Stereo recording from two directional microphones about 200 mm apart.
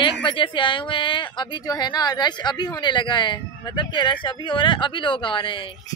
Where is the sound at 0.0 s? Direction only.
25° left (ahead or behind).